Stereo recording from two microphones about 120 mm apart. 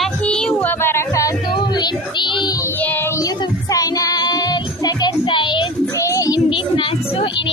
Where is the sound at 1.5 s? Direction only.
40° left (ahead or behind).